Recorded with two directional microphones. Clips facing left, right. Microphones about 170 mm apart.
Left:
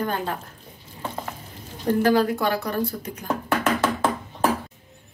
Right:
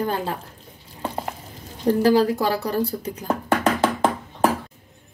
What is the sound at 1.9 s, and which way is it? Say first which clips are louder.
Speech: right 2 dB; 35° right (ahead or behind).